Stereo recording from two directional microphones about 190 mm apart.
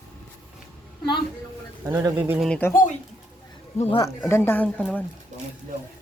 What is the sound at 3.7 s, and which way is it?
Speech, 35° left (ahead or behind).